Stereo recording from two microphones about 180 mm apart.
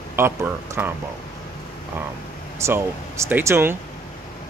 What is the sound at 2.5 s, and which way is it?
Speech, 15° right (ahead or behind).